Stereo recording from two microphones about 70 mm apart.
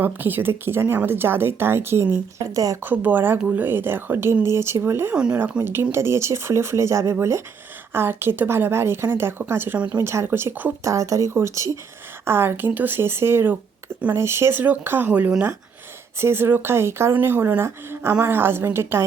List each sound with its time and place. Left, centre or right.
0.0 s speech: right
2.4 s speech: right
2.8 s speech: right
5.1 s speech: centre
5.4 s speech: right
7.9 s speech: right
9.7 s speech: centre
10.0 s speech: right
10.8 s speech: right
14.6 s speech: right
16.1 s speech: right